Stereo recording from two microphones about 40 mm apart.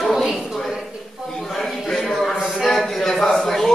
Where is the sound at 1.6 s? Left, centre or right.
Centre.